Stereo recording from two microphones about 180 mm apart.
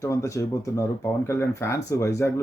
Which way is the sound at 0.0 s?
15° left (ahead or behind).